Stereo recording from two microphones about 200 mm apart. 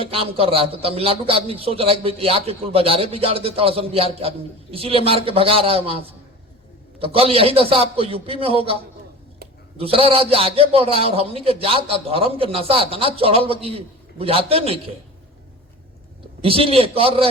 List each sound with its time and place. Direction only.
0.0 s a man's voice: 30° right (ahead or behind)
7.0 s a man's voice: 30° right (ahead or behind)
16.4 s a man's voice: 30° right (ahead or behind)